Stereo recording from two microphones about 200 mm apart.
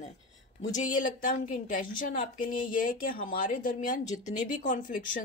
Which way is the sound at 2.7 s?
40° left (ahead or behind).